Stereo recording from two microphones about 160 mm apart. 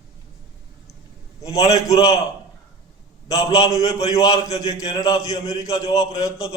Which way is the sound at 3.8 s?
20° left (ahead or behind).